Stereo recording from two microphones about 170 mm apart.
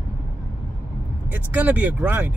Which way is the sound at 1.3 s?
10° right (ahead or behind).